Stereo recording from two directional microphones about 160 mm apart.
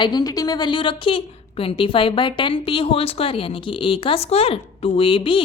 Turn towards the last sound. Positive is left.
turn(degrees=35)  # may be behind; listen again after turning